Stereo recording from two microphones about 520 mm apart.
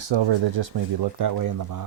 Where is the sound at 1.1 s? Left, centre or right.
Right.